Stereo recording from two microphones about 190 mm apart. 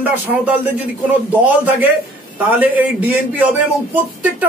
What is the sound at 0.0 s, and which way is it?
Speech, 10° right (ahead or behind).